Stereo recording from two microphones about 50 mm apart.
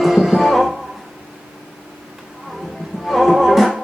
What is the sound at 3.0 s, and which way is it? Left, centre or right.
Music, centre.